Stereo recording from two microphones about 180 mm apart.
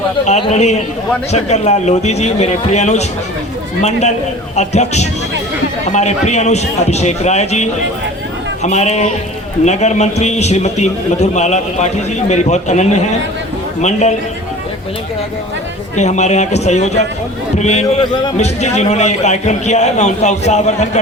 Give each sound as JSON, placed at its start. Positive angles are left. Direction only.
{"t": 0.3, "sound": "a man's voice", "side_deg": 35}
{"t": 4.5, "sound": "a man's voice", "side_deg": 40}
{"t": 16.0, "sound": "a man's voice", "side_deg": 40}